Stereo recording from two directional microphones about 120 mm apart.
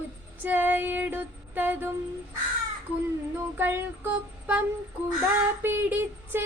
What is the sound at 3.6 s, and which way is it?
Female singing, 15° right (ahead or behind).